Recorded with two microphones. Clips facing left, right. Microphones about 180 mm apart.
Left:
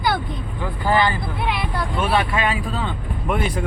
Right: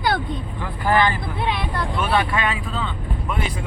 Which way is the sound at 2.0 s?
30° left (ahead or behind).